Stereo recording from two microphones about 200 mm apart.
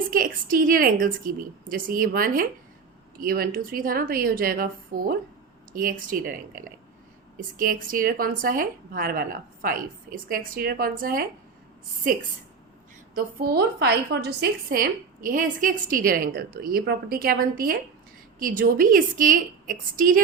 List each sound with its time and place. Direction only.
0.1 s a woman's voice: 45° right (ahead or behind)
13.1 s a woman's voice: 50° right (ahead or behind)